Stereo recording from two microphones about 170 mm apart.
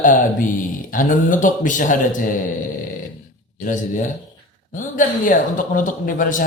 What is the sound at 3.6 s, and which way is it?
A man's voice, 50° left (ahead or behind).